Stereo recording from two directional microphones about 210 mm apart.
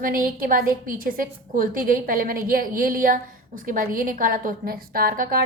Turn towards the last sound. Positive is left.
turn(degrees=-45)  # may be behind; listen again after turning